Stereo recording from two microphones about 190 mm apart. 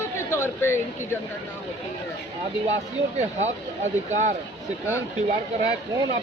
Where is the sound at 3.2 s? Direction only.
35° right (ahead or behind).